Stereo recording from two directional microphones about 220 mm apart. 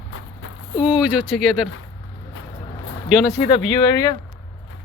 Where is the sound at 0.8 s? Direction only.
5° right (ahead or behind).